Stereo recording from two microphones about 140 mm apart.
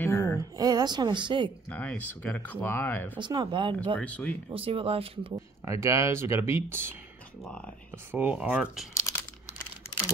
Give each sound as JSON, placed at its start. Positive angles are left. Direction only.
{"t": 0.0, "sound": "music", "side_deg": 20}
{"t": 0.4, "sound": "a woman's voice", "side_deg": -30}
{"t": 1.7, "sound": "speech", "side_deg": 10}
{"t": 3.2, "sound": "speech", "side_deg": -35}
{"t": 4.0, "sound": "speech", "side_deg": 10}
{"t": 4.5, "sound": "speech", "side_deg": -40}
{"t": 5.3, "sound": "speech", "side_deg": -20}
{"t": 7.4, "sound": "speech", "side_deg": 10}
{"t": 8.1, "sound": "speech", "side_deg": -10}